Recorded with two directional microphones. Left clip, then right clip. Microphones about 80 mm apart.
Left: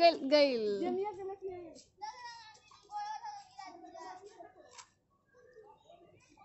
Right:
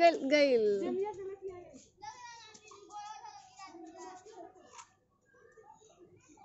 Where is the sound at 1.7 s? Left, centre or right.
Left.